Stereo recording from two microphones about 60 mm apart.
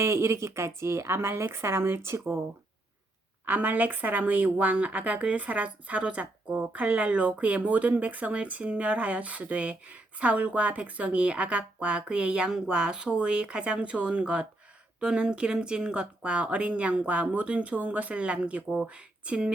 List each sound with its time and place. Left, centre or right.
0.0 s speech: right
3.4 s speech: right